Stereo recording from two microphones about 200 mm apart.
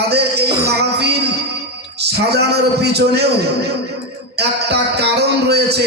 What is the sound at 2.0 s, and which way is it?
A man's voice, 55° right (ahead or behind).